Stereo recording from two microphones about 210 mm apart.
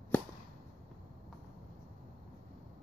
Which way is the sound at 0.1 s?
10° left (ahead or behind).